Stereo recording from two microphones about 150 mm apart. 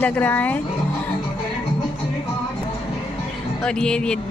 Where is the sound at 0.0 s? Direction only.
10° left (ahead or behind).